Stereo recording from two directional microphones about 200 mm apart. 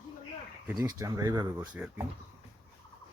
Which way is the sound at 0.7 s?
20° right (ahead or behind).